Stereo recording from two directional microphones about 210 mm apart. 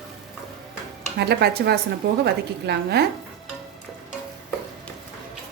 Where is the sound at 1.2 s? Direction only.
50° right (ahead or behind).